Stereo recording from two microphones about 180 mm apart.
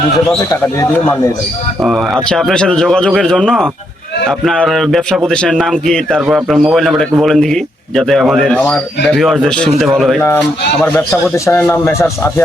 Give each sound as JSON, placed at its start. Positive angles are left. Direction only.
{"t": 0.5, "sound": "speech", "side_deg": 15}
{"t": 1.8, "sound": "a man's voice", "side_deg": 0}